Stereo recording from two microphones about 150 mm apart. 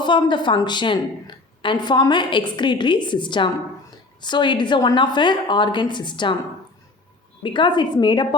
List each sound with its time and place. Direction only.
0.0 s a woman's voice: 30° left (ahead or behind)
7.4 s a woman's voice: 30° left (ahead or behind)